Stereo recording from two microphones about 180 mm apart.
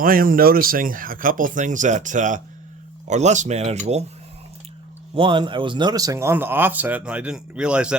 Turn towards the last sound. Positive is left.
turn(degrees=-5)  # may be behind; listen again after turning